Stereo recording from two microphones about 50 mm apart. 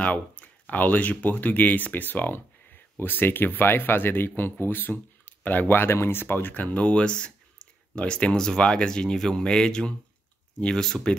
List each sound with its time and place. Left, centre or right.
0.0 s speech: left
5.9 s speech: left; by 11.1 s centre